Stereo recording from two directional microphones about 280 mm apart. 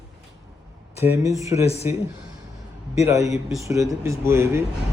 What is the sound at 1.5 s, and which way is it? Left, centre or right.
Speech, left.